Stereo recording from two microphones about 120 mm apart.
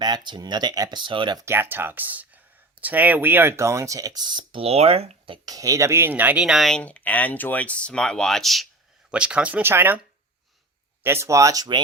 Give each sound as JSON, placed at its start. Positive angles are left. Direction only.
{"t": 0.0, "sound": "speech", "side_deg": -35}
{"t": 1.4, "sound": "speech", "side_deg": -20}
{"t": 4.6, "sound": "speech", "side_deg": -60}
{"t": 5.5, "sound": "speech", "side_deg": -30}
{"t": 11.0, "sound": "speech", "side_deg": -20}